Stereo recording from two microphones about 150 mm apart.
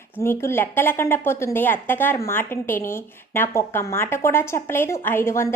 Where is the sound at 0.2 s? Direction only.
15° left (ahead or behind).